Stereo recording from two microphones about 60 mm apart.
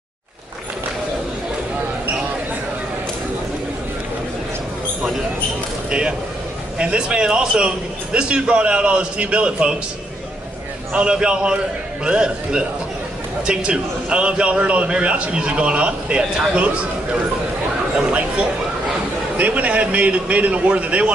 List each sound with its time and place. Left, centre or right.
5.9 s a man's voice: centre
10.9 s a man's voice: centre
19.3 s a man's voice: right